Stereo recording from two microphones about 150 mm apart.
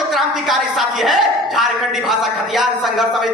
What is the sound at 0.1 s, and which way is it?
A woman's voice, centre (ahead or behind).